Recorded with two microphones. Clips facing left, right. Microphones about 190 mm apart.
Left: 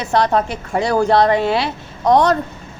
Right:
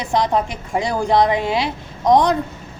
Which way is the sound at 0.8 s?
65° left (ahead or behind).